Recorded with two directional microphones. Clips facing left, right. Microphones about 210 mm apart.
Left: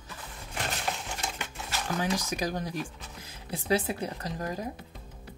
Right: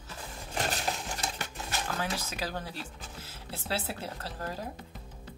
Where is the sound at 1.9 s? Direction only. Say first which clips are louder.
Left 8 dB; 15° left (ahead or behind).